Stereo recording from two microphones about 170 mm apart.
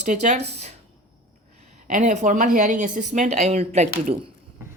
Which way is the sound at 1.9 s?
45° right (ahead or behind).